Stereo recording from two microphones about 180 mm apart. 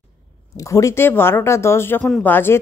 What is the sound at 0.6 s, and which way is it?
Speech, 15° left (ahead or behind).